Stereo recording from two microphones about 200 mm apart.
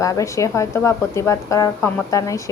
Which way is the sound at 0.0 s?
15° left (ahead or behind).